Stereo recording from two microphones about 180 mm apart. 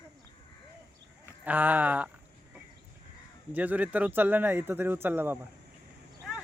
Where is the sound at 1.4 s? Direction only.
10° right (ahead or behind).